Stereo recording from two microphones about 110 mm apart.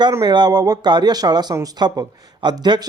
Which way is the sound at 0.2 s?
40° right (ahead or behind).